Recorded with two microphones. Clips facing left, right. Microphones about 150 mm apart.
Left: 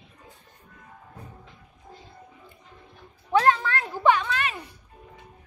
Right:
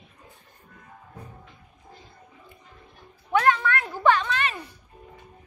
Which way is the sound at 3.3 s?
35° left (ahead or behind).